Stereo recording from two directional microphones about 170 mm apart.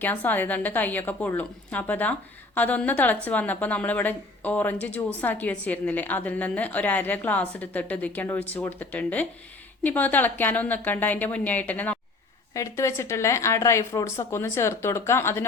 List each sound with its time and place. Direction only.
0.0 s a woman's voice: 10° left (ahead or behind)